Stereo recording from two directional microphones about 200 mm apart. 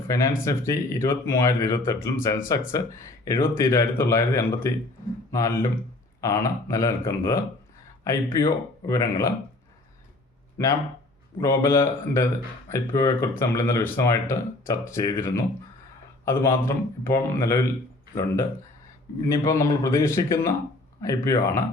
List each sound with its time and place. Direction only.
0.4 s speech: 15° left (ahead or behind)
11.3 s speech: 15° left (ahead or behind)